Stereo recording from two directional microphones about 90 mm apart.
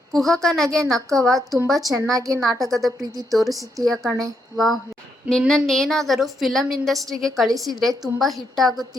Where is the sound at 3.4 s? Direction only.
40° right (ahead or behind).